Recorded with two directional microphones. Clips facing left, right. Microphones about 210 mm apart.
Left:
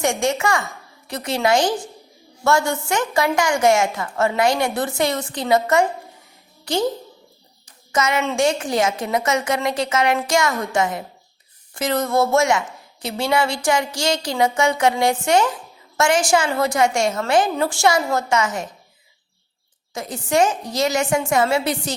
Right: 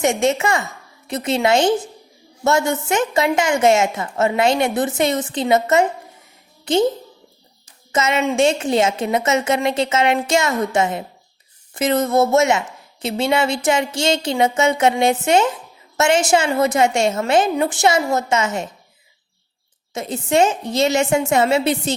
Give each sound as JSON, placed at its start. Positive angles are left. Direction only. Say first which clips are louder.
{"t": 0.0, "sound": "a woman's voice", "louder": "right 3 dB", "side_deg": -20}
{"t": 7.9, "sound": "a woman's voice", "louder": "right 2 dB", "side_deg": -25}
{"t": 19.9, "sound": "a woman's voice", "louder": "right 2 dB", "side_deg": -25}